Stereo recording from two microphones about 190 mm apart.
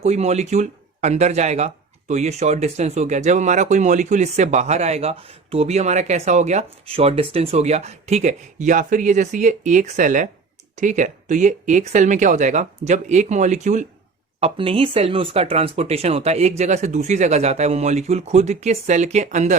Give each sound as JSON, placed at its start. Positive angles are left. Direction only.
{"t": 0.0, "sound": "speech", "side_deg": -35}
{"t": 14.4, "sound": "speech", "side_deg": -30}